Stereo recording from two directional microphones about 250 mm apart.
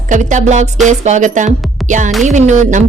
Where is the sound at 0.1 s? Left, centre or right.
Right.